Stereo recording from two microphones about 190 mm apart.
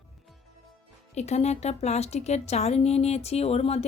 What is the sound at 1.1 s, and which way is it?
Speech, 35° left (ahead or behind).